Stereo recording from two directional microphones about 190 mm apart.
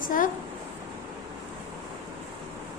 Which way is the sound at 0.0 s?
45° left (ahead or behind).